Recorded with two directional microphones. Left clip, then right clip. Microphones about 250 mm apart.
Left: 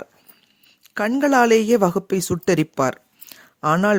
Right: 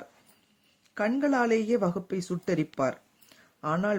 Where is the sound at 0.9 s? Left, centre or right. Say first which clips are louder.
Left 9 dB; left.